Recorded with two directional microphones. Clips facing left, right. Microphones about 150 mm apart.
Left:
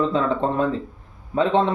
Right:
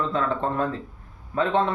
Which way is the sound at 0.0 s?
20° left (ahead or behind).